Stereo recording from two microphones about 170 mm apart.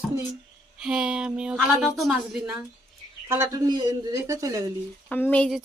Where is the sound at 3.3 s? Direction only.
20° right (ahead or behind).